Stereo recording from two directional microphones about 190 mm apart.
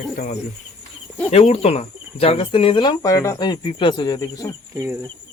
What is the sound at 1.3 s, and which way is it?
Cricket, 35° left (ahead or behind).